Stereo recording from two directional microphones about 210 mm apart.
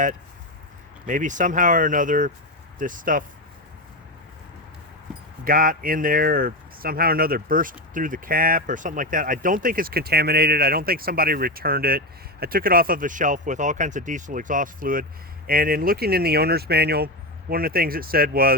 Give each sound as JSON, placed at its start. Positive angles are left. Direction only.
{"t": 1.0, "sound": "speech", "side_deg": -35}
{"t": 5.5, "sound": "speech", "side_deg": -40}